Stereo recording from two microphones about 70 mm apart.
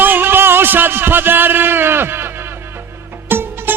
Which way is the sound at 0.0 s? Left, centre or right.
Right.